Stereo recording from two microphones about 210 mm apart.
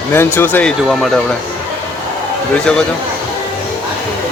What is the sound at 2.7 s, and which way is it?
Speech, 5° left (ahead or behind).